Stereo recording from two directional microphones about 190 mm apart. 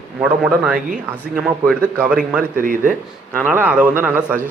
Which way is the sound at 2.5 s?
45° right (ahead or behind).